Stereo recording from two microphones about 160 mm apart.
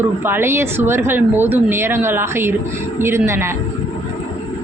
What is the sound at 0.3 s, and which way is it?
A woman's voice, 15° right (ahead or behind).